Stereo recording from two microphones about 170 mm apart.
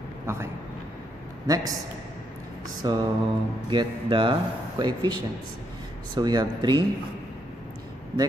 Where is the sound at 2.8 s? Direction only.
25° right (ahead or behind).